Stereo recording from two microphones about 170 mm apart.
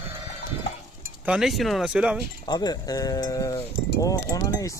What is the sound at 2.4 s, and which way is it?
Speech, 25° left (ahead or behind).